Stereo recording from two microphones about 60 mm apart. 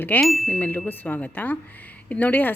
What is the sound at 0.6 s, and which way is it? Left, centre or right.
A woman's voice, left.